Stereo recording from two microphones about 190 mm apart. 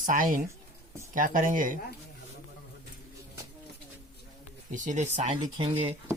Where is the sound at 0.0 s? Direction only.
45° right (ahead or behind).